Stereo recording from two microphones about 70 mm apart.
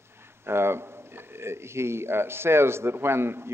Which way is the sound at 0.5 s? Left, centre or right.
Right.